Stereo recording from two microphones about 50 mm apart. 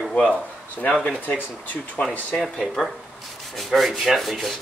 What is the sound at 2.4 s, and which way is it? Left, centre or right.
Speech, centre.